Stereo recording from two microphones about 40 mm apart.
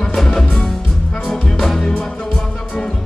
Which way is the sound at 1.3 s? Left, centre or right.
Centre.